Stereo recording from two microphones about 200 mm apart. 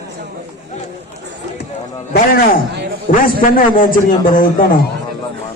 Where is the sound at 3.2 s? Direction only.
45° left (ahead or behind).